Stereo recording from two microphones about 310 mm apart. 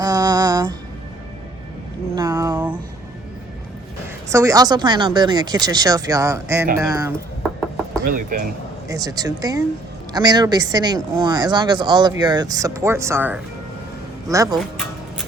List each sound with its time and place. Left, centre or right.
0.0 s music: centre
2.1 s a sound: centre
4.3 s speech: centre
8.0 s speech: right
8.9 s speech: centre